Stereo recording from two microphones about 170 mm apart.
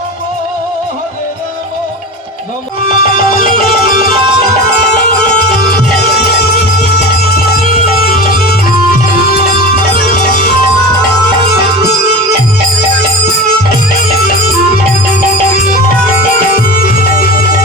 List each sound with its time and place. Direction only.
3.0 s music: 55° left (ahead or behind)
7.9 s music: 60° left (ahead or behind)
16.6 s music: 55° left (ahead or behind)